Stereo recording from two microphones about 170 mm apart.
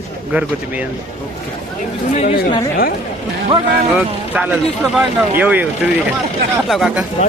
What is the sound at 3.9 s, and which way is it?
Speech, 10° right (ahead or behind).